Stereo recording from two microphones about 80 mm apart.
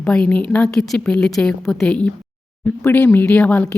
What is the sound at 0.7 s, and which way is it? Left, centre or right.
A woman's voice, centre.